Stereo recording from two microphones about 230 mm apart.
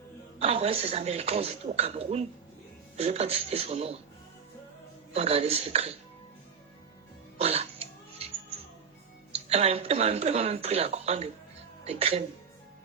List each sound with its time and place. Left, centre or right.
0.3 s speech: right
5.1 s speech: right
7.3 s cough: right
9.3 s speech: right